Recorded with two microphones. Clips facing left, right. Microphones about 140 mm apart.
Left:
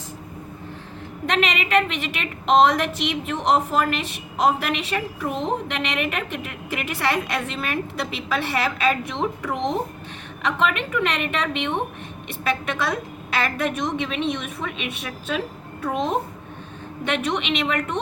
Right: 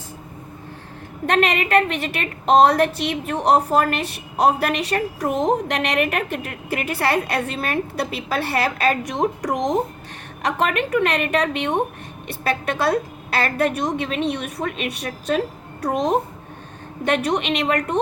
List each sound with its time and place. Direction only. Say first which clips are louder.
1.3 s a woman's voice: right 3 dB; 50° right (ahead or behind)